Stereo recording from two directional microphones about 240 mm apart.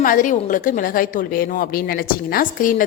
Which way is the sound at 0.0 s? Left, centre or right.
Left.